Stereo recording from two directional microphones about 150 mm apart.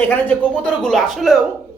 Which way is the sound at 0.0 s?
10° left (ahead or behind).